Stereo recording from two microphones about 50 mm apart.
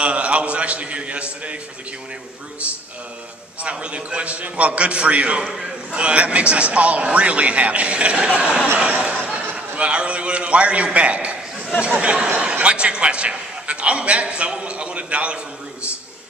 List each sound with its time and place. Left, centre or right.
0.0 s a man's voice: right
3.6 s a man's voice: right
5.4 s a man's voice: centre
5.9 s a man's voice: right